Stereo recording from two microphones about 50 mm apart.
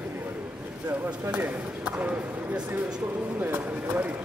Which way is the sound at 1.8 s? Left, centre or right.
Right.